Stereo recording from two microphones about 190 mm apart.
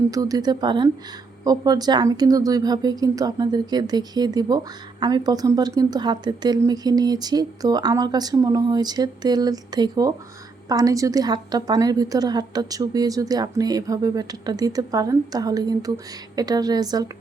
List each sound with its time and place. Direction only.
0.1 s speech: 20° right (ahead or behind)